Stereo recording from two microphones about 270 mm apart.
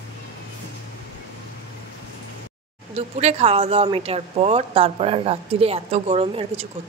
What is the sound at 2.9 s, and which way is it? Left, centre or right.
Speech, right.